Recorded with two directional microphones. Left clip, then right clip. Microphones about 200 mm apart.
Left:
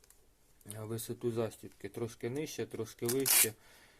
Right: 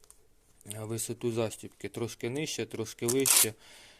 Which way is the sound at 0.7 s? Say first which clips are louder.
Right 4 dB; 30° right (ahead or behind).